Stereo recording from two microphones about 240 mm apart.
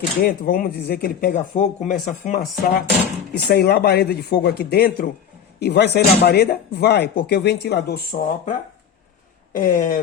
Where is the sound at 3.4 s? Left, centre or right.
Left.